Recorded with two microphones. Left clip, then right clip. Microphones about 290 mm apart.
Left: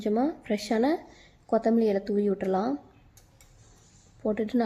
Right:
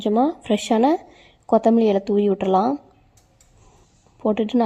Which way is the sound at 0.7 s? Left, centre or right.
Centre.